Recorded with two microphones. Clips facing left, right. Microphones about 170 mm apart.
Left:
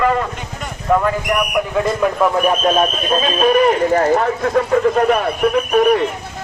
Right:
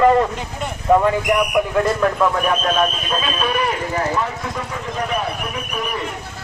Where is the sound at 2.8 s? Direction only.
35° left (ahead or behind); by 5.3 s 70° left (ahead or behind).